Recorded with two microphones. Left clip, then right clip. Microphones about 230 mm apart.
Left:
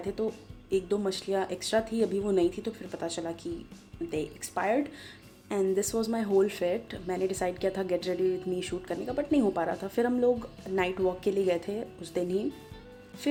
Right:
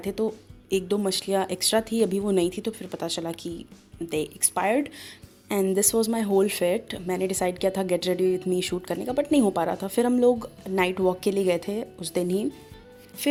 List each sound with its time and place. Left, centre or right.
0.7 s speech: right